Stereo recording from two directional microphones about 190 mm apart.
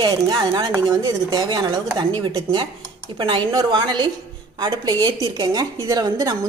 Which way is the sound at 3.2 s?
25° right (ahead or behind).